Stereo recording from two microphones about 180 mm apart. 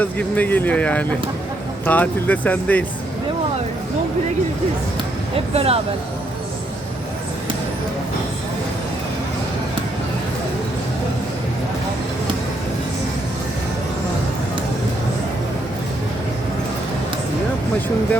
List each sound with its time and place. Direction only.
0.0 s speech: 10° left (ahead or behind)
5.5 s speech: 35° right (ahead or behind)